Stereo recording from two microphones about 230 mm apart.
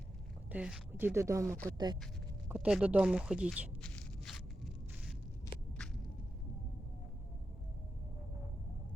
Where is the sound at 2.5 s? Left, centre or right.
Centre.